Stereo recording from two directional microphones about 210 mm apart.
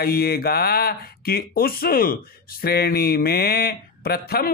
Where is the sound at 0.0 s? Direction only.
45° left (ahead or behind).